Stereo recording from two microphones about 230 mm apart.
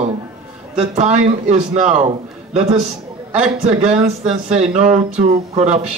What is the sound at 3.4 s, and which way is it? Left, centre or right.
Speech, right.